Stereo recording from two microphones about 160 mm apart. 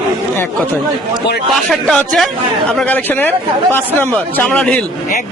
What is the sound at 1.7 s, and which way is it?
A man's voice, 5° left (ahead or behind).